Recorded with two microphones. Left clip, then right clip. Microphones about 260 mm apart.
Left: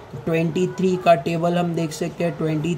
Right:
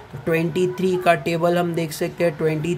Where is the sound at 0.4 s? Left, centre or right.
Right.